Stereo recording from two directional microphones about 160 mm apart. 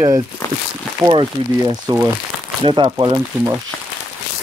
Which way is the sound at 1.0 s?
25° right (ahead or behind).